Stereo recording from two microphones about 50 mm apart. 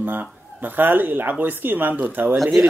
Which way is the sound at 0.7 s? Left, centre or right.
Right.